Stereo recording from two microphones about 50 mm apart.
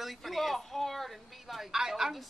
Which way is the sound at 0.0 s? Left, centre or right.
Centre.